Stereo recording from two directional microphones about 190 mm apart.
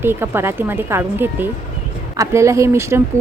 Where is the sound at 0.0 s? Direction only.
10° right (ahead or behind).